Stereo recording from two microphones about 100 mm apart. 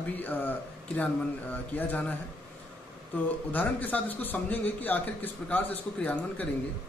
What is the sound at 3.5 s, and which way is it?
A man's voice, 15° left (ahead or behind).